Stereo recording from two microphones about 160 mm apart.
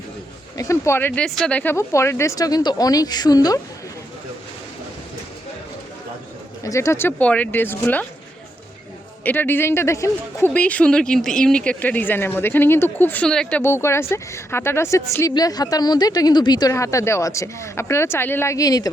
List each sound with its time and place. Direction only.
0.5 s a woman's voice: 20° left (ahead or behind)
6.7 s speech: 20° left (ahead or behind)
9.2 s speech: 10° left (ahead or behind)
13.6 s a woman's voice: 15° left (ahead or behind)